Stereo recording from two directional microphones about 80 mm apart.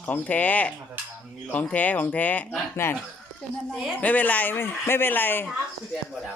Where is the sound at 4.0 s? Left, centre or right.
Centre.